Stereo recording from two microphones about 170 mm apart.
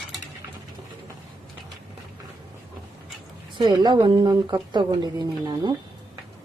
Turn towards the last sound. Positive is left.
turn(degrees=-25)  # may be behind; listen again after turning